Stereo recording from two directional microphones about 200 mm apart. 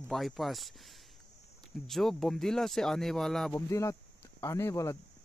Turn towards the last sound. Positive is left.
turn(degrees=15)  # may be behind; listen again after turning